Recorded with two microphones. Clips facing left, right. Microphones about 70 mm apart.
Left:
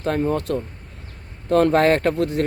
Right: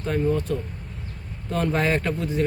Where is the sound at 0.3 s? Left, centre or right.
Left.